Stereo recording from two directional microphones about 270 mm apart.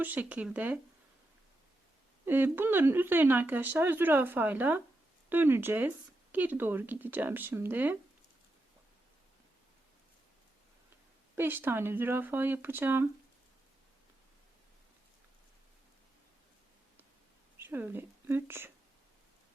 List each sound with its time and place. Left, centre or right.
0.0 s speech: centre
2.2 s speech: centre
11.3 s speech: centre
17.6 s a woman's voice: centre